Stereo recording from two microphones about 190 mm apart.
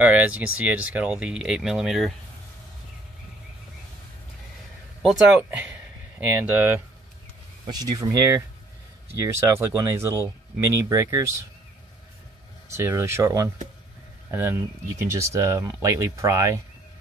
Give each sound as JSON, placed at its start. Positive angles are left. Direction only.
{"t": 0.0, "sound": "speech", "side_deg": -5}
{"t": 5.0, "sound": "speech", "side_deg": -5}
{"t": 7.6, "sound": "speech", "side_deg": -20}
{"t": 12.6, "sound": "speech", "side_deg": -15}